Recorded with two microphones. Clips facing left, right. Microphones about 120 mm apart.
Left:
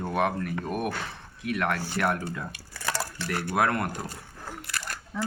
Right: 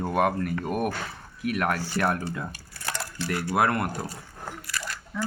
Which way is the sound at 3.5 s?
5° right (ahead or behind).